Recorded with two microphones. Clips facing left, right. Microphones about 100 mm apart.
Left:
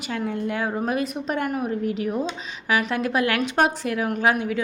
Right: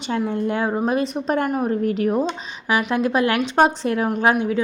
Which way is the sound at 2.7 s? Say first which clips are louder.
Right 3 dB; 20° right (ahead or behind).